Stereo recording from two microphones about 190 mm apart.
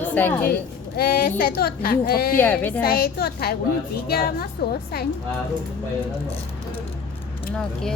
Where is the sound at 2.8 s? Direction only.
50° left (ahead or behind).